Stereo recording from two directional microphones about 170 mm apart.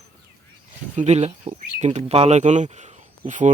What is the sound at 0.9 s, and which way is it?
Speech, 40° right (ahead or behind).